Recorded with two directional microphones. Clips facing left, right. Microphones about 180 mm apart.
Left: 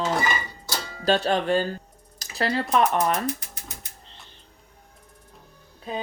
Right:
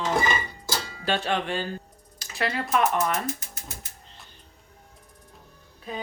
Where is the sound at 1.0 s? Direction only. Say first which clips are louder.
Left 5 dB; 40° left (ahead or behind).